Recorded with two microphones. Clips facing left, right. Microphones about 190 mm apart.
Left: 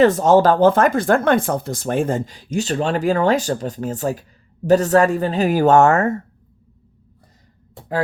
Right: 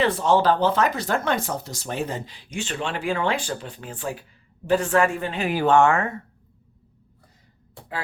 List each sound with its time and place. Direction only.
0.0 s speech: 45° left (ahead or behind)